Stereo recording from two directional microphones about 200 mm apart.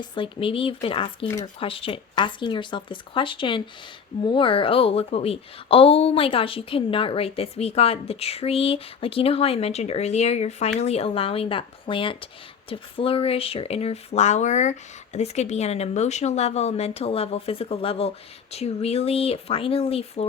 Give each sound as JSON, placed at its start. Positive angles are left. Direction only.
{"t": 0.0, "sound": "speech", "side_deg": 25}